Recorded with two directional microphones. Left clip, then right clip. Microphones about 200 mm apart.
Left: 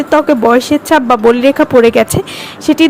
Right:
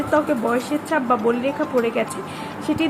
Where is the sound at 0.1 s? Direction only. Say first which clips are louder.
Left 12 dB; 45° left (ahead or behind).